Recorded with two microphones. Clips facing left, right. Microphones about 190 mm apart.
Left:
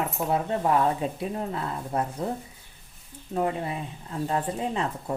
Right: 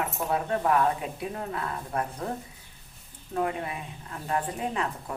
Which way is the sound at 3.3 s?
25° left (ahead or behind).